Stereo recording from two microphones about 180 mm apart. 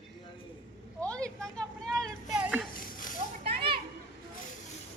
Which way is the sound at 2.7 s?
50° left (ahead or behind).